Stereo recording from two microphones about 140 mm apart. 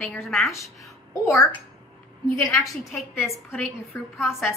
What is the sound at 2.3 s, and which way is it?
Speech, 20° left (ahead or behind).